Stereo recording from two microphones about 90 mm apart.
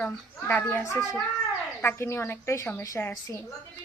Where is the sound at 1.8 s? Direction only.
25° left (ahead or behind).